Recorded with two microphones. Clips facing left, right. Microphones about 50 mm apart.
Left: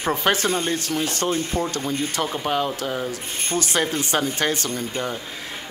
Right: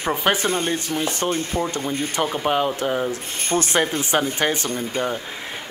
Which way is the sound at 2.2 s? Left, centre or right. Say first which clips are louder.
Right 5 dB; centre.